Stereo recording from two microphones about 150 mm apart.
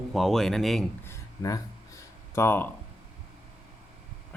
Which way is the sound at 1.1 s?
20° left (ahead or behind).